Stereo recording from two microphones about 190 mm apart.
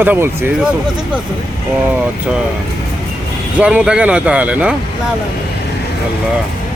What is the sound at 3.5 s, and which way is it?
Speech, 5° right (ahead or behind).